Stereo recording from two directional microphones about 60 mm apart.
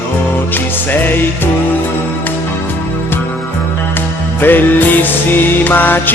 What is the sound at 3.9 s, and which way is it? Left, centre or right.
Music, left.